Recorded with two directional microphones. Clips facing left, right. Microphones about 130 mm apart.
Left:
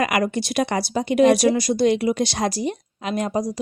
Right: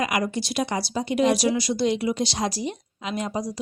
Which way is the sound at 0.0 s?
60° left (ahead or behind).